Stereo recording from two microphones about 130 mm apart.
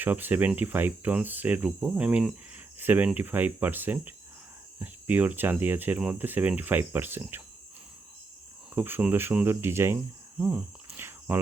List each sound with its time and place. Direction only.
0.0 s speech: 15° right (ahead or behind)
2.7 s cricket: 15° right (ahead or behind)
3.2 s speech: 15° right (ahead or behind)
8.7 s speech: 15° right (ahead or behind)
10.3 s cricket: 10° right (ahead or behind)